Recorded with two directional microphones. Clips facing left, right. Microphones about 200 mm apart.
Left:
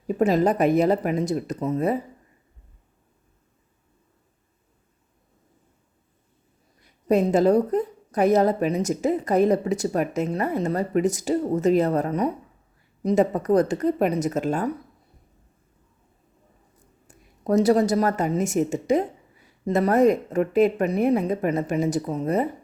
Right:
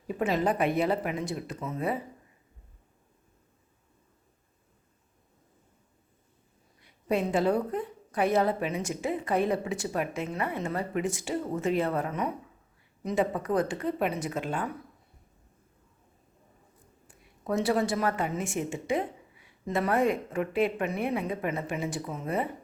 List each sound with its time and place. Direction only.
0.1 s a woman's voice: 40° left (ahead or behind)
6.8 s a woman's voice: 40° left (ahead or behind)
17.1 s a woman's voice: 40° left (ahead or behind)